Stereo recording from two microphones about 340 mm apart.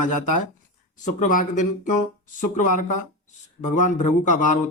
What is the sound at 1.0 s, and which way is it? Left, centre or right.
Speech, left.